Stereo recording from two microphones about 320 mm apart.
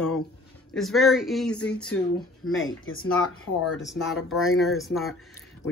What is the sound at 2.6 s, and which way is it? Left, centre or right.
Speech, left.